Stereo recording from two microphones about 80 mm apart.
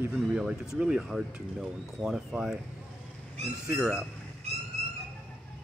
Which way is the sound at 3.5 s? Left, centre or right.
Right.